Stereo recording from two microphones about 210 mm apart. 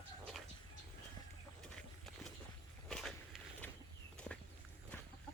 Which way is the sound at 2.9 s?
Centre (ahead or behind).